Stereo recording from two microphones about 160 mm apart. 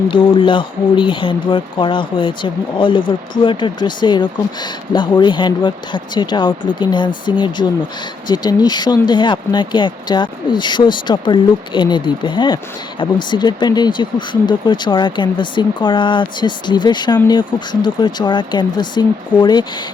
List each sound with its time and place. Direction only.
0.1 s speech: 30° left (ahead or behind)